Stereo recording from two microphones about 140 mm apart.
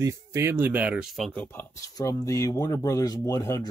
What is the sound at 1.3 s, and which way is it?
Speech, 15° left (ahead or behind).